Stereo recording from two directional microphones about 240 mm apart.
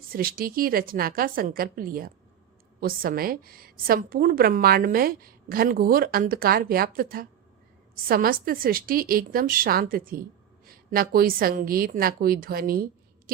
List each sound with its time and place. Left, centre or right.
0.1 s a woman's voice: right